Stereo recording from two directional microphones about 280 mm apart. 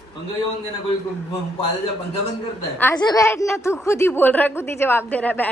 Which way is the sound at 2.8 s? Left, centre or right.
Centre.